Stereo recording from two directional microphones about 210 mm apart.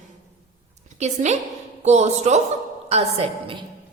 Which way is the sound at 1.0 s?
35° right (ahead or behind).